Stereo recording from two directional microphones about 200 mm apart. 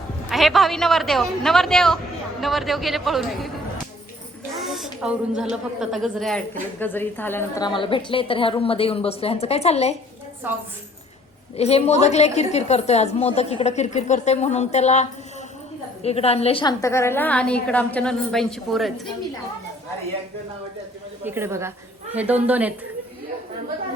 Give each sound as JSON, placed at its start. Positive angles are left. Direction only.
{"t": 0.3, "sound": "a woman's voice", "side_deg": 0}
{"t": 4.6, "sound": "a woman's voice", "side_deg": 0}
{"t": 11.5, "sound": "a woman's voice", "side_deg": 30}
{"t": 16.0, "sound": "a woman's voice", "side_deg": 30}
{"t": 21.2, "sound": "a woman's voice", "side_deg": -10}